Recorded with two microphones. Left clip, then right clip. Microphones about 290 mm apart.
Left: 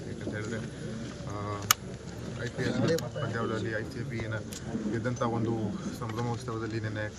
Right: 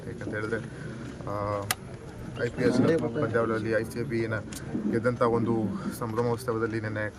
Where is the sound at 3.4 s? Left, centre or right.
Centre.